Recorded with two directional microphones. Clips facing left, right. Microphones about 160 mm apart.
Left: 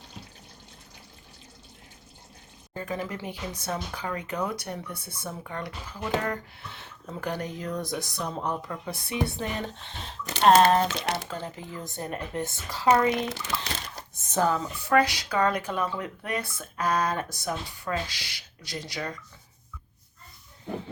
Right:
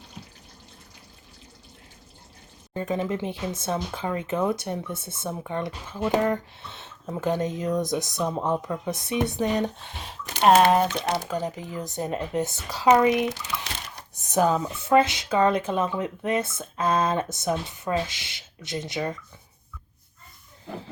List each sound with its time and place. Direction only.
2.7 s speech: 25° right (ahead or behind)